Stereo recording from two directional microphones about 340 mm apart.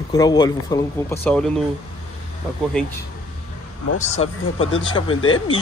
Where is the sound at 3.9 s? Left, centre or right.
Centre.